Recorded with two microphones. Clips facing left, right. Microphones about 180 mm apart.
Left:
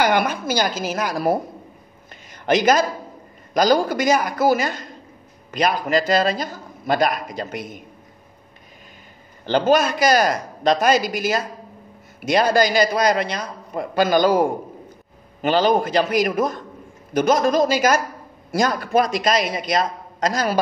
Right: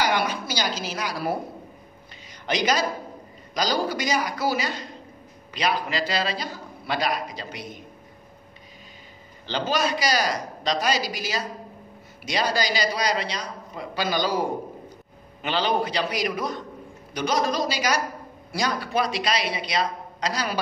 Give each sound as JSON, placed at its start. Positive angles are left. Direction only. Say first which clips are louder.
{"t": 0.0, "sound": "a man's voice", "louder": "left 5 dB", "side_deg": 50}
{"t": 2.4, "sound": "a man's voice", "louder": "left 7 dB", "side_deg": 50}
{"t": 9.5, "sound": "a man's voice", "louder": "left 8 dB", "side_deg": 50}